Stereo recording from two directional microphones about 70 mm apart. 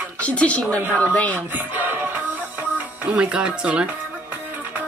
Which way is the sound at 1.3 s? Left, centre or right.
Right.